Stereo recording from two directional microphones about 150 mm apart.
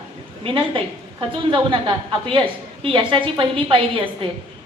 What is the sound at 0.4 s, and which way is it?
A woman's voice, 35° right (ahead or behind).